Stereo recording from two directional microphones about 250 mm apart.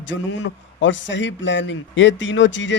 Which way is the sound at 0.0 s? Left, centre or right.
Left.